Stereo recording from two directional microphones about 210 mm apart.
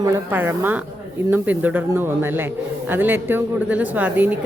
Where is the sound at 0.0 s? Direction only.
10° right (ahead or behind).